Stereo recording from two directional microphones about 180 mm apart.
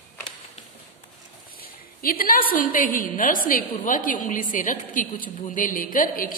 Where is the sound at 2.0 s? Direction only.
55° left (ahead or behind).